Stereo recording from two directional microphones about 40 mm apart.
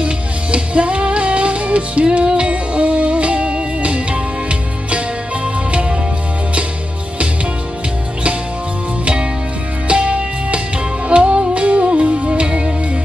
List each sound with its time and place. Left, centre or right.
0.0 s music: right
9.0 s music: right